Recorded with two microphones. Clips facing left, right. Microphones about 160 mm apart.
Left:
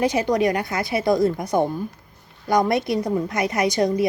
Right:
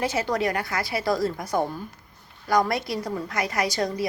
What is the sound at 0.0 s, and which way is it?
A woman's voice, 15° left (ahead or behind).